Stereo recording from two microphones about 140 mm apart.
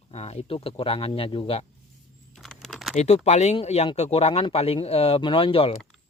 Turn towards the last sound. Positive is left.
turn(degrees=40)  # may be behind; listen again after turning